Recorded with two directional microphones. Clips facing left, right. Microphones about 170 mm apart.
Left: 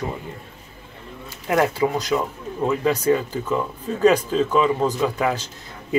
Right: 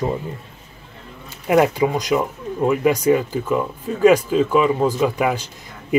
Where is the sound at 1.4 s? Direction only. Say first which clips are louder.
Right 4 dB; 20° right (ahead or behind).